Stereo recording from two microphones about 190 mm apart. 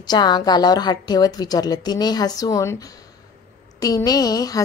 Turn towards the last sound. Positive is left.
turn(degrees=20)  # may be behind; listen again after turning